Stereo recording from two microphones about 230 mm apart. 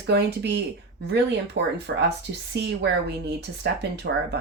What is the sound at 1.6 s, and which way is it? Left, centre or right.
Speech, right.